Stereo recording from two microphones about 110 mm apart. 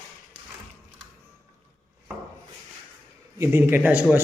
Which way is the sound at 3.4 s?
20° right (ahead or behind).